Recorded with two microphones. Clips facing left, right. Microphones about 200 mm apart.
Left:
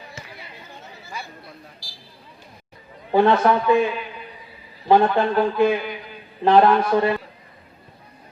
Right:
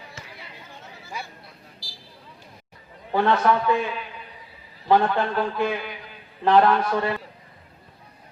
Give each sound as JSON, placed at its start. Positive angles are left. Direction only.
{"t": 3.1, "sound": "a man's voice", "side_deg": 15}